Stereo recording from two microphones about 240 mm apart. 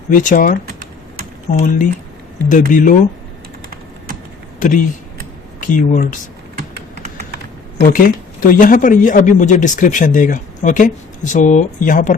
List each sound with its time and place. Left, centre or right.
0.1 s speech: left
4.6 s speech: left
6.6 s typing: right
7.9 s speech: left